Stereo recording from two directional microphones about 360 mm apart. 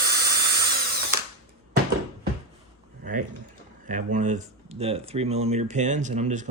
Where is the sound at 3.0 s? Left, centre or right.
Right.